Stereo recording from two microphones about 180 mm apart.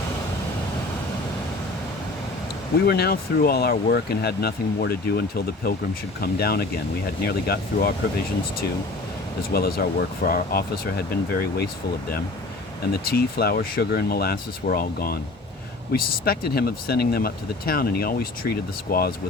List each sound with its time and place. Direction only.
2.7 s speech: 65° left (ahead or behind)
9.5 s speech: 60° left (ahead or behind)
12.9 s speech: 60° left (ahead or behind)